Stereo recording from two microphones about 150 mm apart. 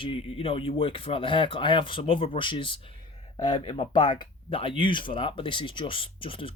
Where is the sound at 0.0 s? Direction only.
40° left (ahead or behind).